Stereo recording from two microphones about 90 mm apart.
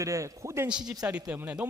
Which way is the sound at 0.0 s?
35° right (ahead or behind).